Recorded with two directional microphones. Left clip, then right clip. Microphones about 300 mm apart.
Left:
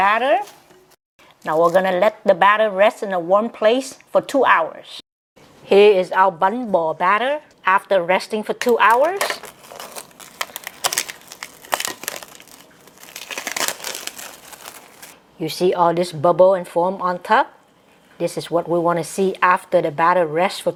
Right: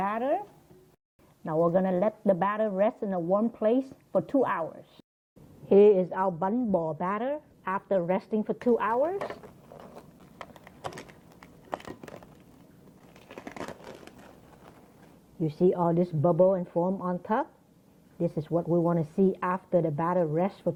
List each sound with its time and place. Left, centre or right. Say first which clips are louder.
0.0 s speech: left 13 dB; centre
1.7 s a woman's voice: left 10 dB; centre
6.7 s speech: left 10 dB; left
7.0 s a sound: left 13 dB; centre
13.1 s crumpling: left 17 dB; centre
15.4 s a woman's voice: left 9 dB; centre
18.6 s a woman's voice: left 8 dB; centre